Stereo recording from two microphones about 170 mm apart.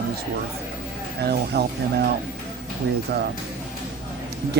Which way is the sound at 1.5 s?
65° right (ahead or behind).